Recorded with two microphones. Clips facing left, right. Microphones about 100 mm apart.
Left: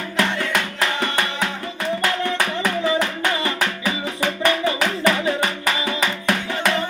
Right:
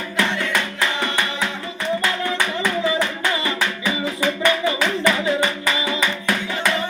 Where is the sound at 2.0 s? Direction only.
50° left (ahead or behind).